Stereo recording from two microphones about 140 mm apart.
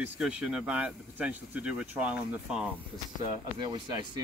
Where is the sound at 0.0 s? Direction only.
5° right (ahead or behind).